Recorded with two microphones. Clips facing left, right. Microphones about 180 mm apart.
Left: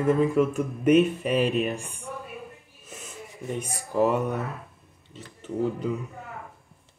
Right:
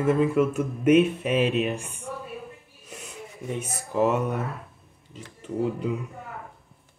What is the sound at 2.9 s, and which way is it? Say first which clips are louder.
Music: right 1 dB; 5° left (ahead or behind).